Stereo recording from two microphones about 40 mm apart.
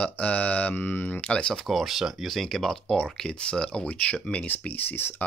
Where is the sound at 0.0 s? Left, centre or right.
Left.